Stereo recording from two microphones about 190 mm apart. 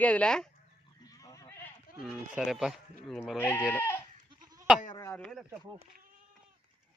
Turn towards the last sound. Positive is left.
turn(degrees=0)  # may be behind; listen again after turning